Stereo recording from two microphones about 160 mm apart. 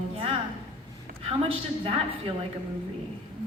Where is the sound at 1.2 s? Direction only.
35° right (ahead or behind).